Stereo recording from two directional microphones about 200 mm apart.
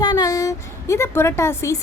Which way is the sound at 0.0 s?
20° left (ahead or behind).